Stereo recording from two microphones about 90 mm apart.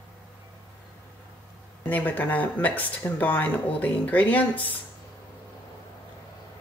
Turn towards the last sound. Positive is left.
turn(degrees=20)  # may be behind; listen again after turning